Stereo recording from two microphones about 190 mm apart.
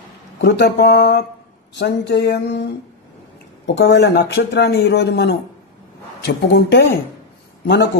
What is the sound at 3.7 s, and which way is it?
A man's voice, 65° left (ahead or behind).